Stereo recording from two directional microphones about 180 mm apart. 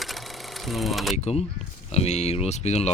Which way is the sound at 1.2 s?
35° left (ahead or behind).